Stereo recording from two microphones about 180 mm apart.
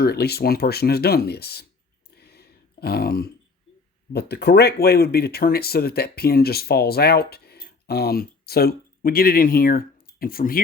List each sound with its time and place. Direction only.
0.0 s speech: 65° left (ahead or behind)
2.1 s a sound: 65° left (ahead or behind)
4.1 s speech: 65° left (ahead or behind)